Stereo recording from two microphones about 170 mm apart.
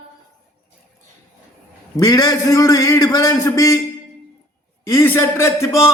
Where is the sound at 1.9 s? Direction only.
20° left (ahead or behind).